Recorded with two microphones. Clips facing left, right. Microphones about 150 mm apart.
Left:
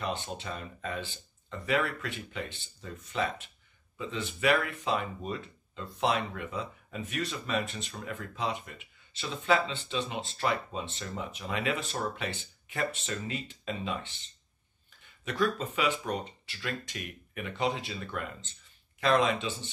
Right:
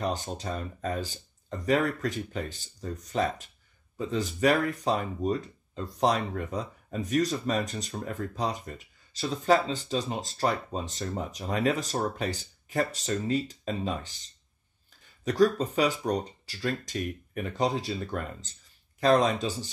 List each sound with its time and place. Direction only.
0.0 s speech: 40° right (ahead or behind)